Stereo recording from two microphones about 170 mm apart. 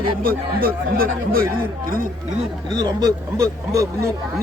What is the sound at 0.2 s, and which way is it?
Speech, 60° right (ahead or behind).